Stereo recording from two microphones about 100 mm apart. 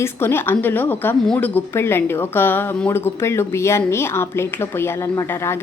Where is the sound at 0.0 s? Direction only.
25° left (ahead or behind).